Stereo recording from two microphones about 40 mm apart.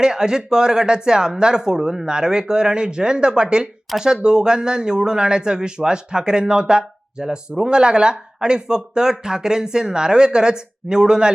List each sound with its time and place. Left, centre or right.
0.0 s speech: centre